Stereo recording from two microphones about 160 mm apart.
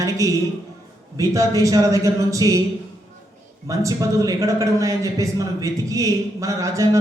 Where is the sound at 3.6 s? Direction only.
20° right (ahead or behind).